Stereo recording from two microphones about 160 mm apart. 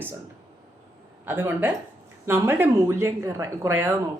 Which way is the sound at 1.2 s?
15° right (ahead or behind).